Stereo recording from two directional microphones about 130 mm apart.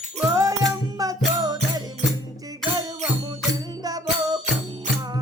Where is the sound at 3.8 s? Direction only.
30° right (ahead or behind).